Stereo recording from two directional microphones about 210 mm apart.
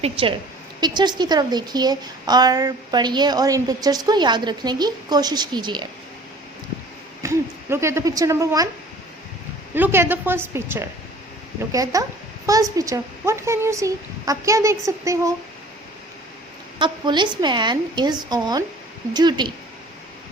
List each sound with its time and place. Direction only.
0.0 s a woman's voice: 25° right (ahead or behind)
7.2 s speech: 15° right (ahead or behind)
9.7 s a woman's voice: 10° right (ahead or behind)
16.7 s a woman's voice: 20° right (ahead or behind)